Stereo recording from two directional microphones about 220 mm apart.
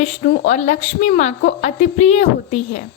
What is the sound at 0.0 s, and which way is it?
A woman's voice, 30° left (ahead or behind).